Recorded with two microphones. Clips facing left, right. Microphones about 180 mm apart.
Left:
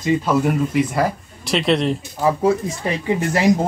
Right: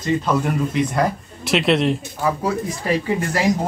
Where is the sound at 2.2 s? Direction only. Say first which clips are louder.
Left 7 dB; 25° left (ahead or behind).